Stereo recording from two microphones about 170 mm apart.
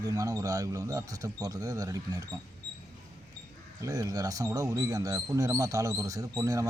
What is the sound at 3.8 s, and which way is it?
Speech, 20° right (ahead or behind).